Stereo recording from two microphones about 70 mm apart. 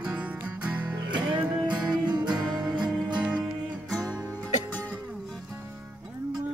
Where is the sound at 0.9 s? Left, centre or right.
Right.